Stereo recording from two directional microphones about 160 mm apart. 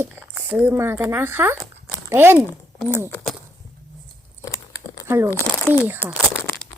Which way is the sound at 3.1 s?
5° left (ahead or behind).